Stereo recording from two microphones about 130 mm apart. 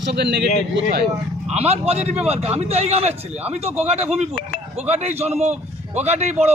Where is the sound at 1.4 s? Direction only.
55° right (ahead or behind).